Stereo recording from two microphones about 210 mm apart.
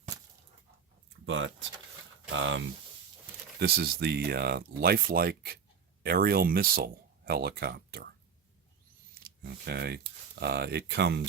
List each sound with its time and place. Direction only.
1.3 s speech: 65° right (ahead or behind)
3.6 s speech: 50° right (ahead or behind)
9.4 s speech: 50° right (ahead or behind)